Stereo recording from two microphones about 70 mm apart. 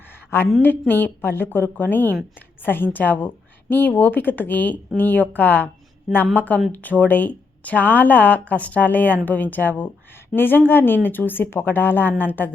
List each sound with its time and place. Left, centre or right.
0.6 s speech: left